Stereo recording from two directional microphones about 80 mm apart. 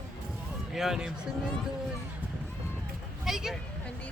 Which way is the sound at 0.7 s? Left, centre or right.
Centre.